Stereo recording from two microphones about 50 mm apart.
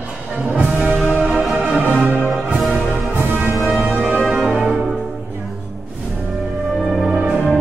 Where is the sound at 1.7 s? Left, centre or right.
Right.